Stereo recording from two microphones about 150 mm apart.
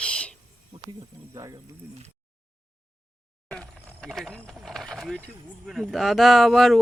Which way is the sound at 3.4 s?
10° left (ahead or behind).